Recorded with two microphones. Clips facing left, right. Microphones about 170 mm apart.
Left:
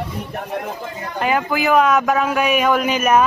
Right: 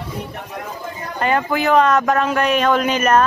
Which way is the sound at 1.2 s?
5° left (ahead or behind).